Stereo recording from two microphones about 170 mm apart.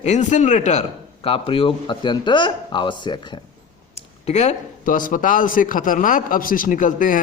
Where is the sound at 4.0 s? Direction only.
40° left (ahead or behind).